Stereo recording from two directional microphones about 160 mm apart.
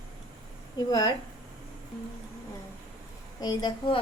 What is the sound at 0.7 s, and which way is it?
Speech, 25° left (ahead or behind).